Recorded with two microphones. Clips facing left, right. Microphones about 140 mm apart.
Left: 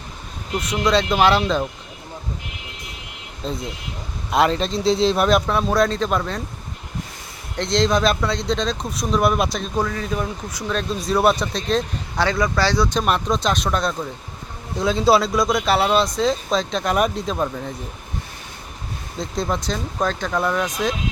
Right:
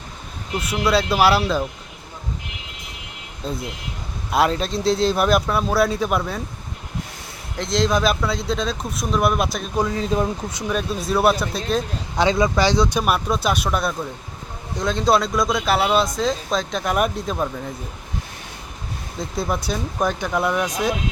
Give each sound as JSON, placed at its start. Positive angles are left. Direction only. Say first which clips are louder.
{"t": 0.6, "sound": "speech", "louder": "left 1 dB", "side_deg": -5}
{"t": 3.4, "sound": "speech", "louder": "even", "side_deg": -5}
{"t": 7.5, "sound": "speech", "louder": "left 1 dB", "side_deg": 0}
{"t": 9.7, "sound": "speech", "louder": "right 4 dB", "side_deg": -20}
{"t": 10.7, "sound": "speech", "louder": "even", "side_deg": -5}
{"t": 12.1, "sound": "speech", "louder": "right 2 dB", "side_deg": -20}
{"t": 13.0, "sound": "speech", "louder": "even", "side_deg": -5}
{"t": 14.8, "sound": "speech", "louder": "left 2 dB", "side_deg": 5}
{"t": 19.2, "sound": "speech", "louder": "left 1 dB", "side_deg": -5}